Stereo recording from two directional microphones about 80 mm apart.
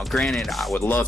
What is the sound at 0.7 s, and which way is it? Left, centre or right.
Speech, left.